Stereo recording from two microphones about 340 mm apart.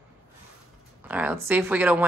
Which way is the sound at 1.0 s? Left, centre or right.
Centre.